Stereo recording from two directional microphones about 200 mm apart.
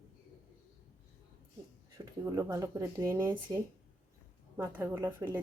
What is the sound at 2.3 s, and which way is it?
Speech, 15° right (ahead or behind).